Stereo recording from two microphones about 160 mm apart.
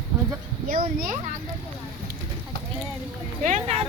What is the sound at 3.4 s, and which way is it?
Speech, 45° right (ahead or behind).